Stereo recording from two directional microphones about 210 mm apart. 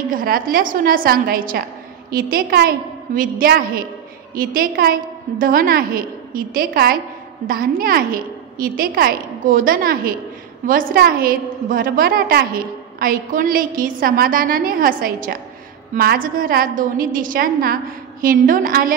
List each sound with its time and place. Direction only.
0.1 s a woman's voice: 45° right (ahead or behind)